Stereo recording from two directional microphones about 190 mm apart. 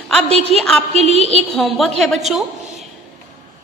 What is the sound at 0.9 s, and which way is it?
Speech, 35° right (ahead or behind).